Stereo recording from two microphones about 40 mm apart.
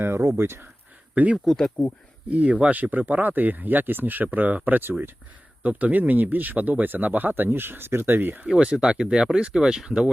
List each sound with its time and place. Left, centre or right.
0.0 s speech: right
1.1 s speech: right
1.5 s speech: centre
2.3 s speech: right
8.4 s speech: centre